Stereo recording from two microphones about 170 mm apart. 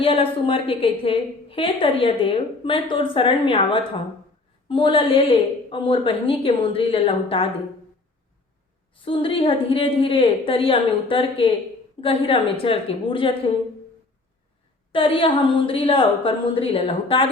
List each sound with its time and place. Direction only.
0.0 s a woman's voice: 30° left (ahead or behind)
9.0 s a woman's voice: 30° left (ahead or behind)
14.9 s a woman's voice: 30° left (ahead or behind)